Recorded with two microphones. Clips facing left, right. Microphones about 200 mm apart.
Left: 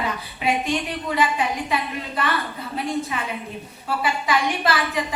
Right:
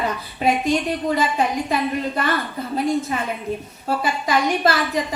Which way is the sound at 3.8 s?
45° right (ahead or behind).